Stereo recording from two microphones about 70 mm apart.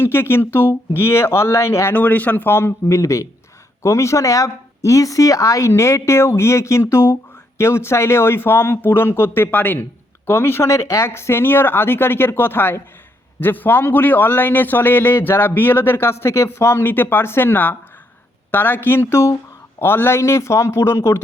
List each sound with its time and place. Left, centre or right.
0.0 s a man's voice: left
1.9 s a man's voice: left
2.8 s a man's voice: left